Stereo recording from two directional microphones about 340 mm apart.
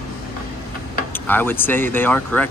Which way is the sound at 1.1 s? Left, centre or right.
Centre.